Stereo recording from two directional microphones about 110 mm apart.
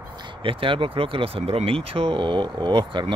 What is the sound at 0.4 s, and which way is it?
Speech, 55° right (ahead or behind).